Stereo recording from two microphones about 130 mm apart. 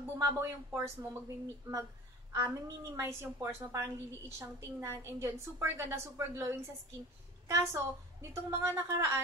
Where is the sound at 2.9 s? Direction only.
20° right (ahead or behind).